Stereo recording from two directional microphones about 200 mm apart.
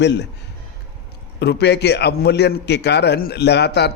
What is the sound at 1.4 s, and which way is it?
A man's voice, 55° left (ahead or behind).